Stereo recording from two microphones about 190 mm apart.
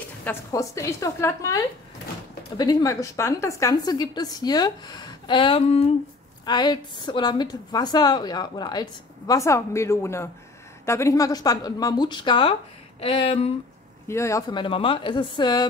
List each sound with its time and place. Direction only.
0.2 s a woman's voice: 15° left (ahead or behind); by 13.5 s 30° left (ahead or behind)
14.0 s a woman's voice: 15° left (ahead or behind)